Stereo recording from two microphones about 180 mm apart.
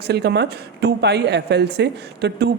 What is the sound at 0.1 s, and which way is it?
Speech, 65° right (ahead or behind).